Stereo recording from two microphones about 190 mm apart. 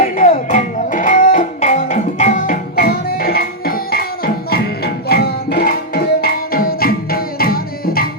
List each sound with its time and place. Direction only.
0.3 s music: 40° left (ahead or behind)